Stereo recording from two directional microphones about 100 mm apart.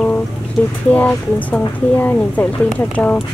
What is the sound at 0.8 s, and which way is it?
Speech, 15° left (ahead or behind).